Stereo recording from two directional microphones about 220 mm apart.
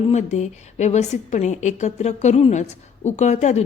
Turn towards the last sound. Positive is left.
turn(degrees=30)  # may be behind; listen again after turning